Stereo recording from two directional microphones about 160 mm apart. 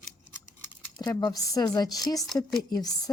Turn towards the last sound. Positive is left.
turn(degrees=25)  # may be behind; listen again after turning